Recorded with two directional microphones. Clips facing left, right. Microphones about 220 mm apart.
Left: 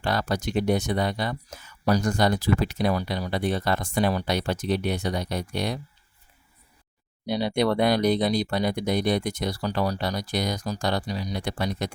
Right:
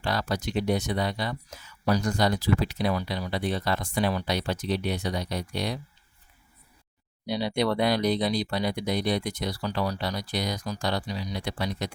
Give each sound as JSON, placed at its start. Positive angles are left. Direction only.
{"t": 0.0, "sound": "speech", "side_deg": 50}
{"t": 7.3, "sound": "speech", "side_deg": 50}